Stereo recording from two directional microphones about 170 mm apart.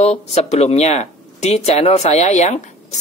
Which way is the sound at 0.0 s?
40° left (ahead or behind).